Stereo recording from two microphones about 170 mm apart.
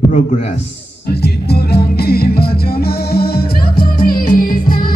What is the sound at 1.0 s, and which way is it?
Music, 70° left (ahead or behind).